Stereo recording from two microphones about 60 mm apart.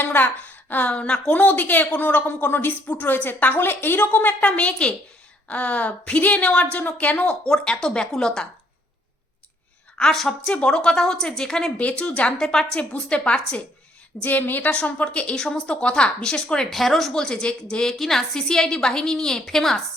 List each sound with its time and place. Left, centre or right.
0.0 s a woman's voice: left
7.5 s speech: centre
10.0 s speech: centre
11.8 s a woman's voice: left
14.2 s a woman's voice: left; by 19.8 s centre